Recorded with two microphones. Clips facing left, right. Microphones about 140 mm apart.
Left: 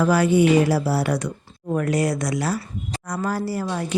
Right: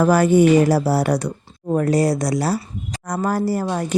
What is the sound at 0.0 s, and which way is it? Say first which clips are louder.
A woman's voice: right 3 dB; 45° right (ahead or behind).